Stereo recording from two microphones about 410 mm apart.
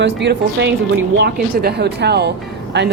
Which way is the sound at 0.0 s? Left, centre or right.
Right.